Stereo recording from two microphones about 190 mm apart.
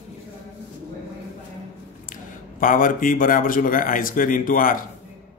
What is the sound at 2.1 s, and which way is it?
Speech, 45° left (ahead or behind).